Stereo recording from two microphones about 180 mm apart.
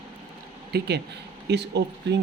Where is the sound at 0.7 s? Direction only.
60° right (ahead or behind).